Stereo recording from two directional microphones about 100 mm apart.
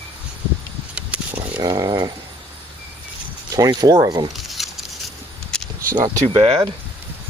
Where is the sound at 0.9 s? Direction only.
15° right (ahead or behind).